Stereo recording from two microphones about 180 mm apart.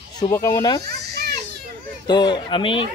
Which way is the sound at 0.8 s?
60° right (ahead or behind).